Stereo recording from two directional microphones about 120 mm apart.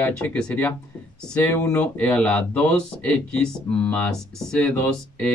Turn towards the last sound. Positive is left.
turn(degrees=10)  # may be behind; listen again after turning